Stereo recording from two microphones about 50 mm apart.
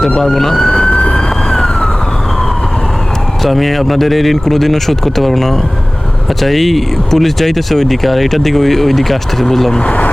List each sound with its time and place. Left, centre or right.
0.2 s police car: centre
1.5 s emergency vehicle: centre
3.4 s speech: centre
9.8 s speech: left